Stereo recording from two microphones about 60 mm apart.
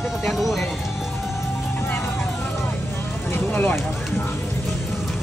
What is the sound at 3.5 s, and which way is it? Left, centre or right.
Speech, left.